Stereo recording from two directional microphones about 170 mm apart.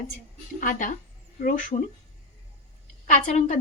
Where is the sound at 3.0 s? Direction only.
45° left (ahead or behind).